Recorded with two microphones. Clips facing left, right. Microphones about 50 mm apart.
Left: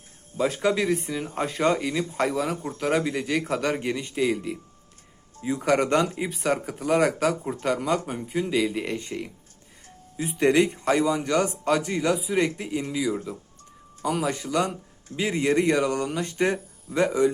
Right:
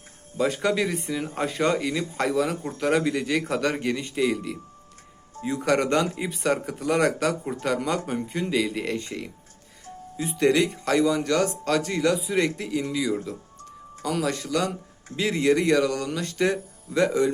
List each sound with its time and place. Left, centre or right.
0.3 s speech: centre
10.2 s speech: left